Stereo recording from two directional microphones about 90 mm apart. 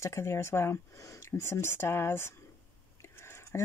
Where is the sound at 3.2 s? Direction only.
30° left (ahead or behind).